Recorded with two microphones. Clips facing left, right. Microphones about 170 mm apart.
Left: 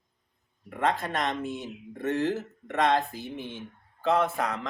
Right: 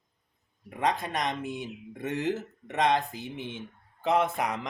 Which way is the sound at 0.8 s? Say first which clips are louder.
Left 1 dB; 15° right (ahead or behind).